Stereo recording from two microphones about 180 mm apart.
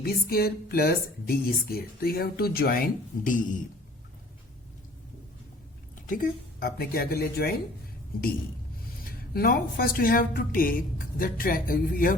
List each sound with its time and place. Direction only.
0.0 s speech: 55° left (ahead or behind)
6.1 s speech: 55° left (ahead or behind)
9.3 s speech: 55° left (ahead or behind)